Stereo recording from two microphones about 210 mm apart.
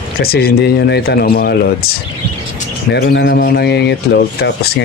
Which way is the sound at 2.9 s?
50° left (ahead or behind).